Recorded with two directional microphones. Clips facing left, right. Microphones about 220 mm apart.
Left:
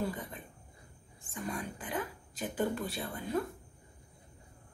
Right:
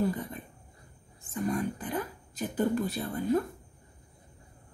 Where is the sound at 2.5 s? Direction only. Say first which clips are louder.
Right 5 dB; 40° right (ahead or behind).